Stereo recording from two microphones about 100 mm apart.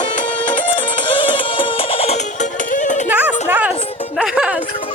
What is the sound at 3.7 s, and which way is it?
Music, 75° left (ahead or behind).